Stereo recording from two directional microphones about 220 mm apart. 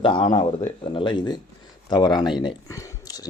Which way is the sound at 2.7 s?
15° left (ahead or behind).